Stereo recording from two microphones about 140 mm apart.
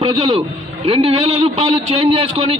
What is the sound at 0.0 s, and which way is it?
A man's voice, 40° right (ahead or behind).